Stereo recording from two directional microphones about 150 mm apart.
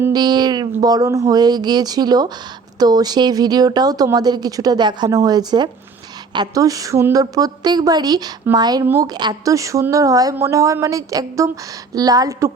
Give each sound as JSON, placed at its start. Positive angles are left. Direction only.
{"t": 0.1, "sound": "speech", "side_deg": -25}
{"t": 8.8, "sound": "a woman's voice", "side_deg": -15}